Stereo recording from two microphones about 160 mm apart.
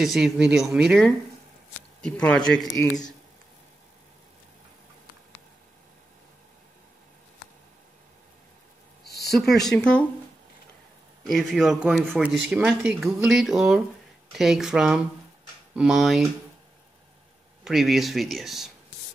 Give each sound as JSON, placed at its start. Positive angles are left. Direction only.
{"t": 0.0, "sound": "speech", "side_deg": 0}
{"t": 2.7, "sound": "speech", "side_deg": 15}
{"t": 9.3, "sound": "speech", "side_deg": 0}
{"t": 11.2, "sound": "speech", "side_deg": 0}
{"t": 17.6, "sound": "speech", "side_deg": 0}